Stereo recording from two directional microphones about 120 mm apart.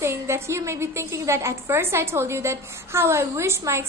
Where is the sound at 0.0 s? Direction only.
20° right (ahead or behind).